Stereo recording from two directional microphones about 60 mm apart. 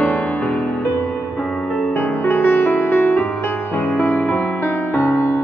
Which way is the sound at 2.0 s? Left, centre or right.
Left.